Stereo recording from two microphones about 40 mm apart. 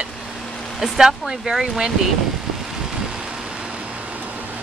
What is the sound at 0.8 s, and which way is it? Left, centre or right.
Speech, centre.